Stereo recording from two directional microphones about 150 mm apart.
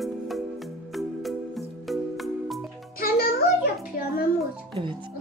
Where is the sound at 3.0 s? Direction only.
90° left.